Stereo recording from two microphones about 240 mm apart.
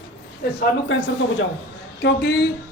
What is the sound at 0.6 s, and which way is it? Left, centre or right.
Speech, left.